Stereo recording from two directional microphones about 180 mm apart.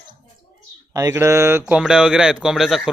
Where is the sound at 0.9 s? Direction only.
15° right (ahead or behind).